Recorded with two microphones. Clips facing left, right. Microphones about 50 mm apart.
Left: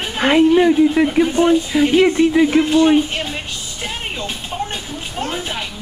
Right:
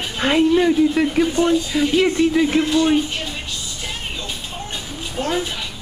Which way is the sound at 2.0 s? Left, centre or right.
Centre.